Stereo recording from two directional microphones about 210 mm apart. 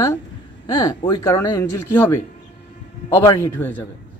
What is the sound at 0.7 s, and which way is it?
Speech, 15° left (ahead or behind).